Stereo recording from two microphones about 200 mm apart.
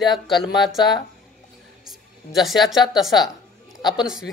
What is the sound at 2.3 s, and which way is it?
Speech, centre (ahead or behind).